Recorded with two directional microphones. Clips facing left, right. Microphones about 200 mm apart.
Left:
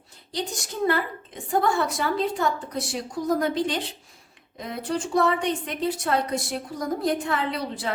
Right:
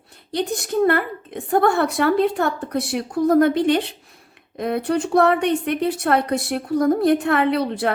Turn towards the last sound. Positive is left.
turn(degrees=-60)  # may be behind; listen again after turning